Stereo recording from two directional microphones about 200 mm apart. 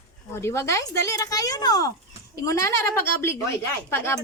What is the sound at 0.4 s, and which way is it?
Speech, 15° left (ahead or behind).